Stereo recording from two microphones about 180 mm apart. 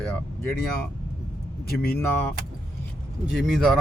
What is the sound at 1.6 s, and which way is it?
Speech, 55° left (ahead or behind).